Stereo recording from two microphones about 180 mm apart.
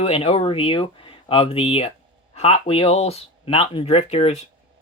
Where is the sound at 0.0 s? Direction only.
35° left (ahead or behind).